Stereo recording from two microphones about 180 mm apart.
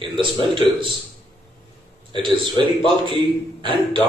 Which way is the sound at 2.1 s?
25° right (ahead or behind).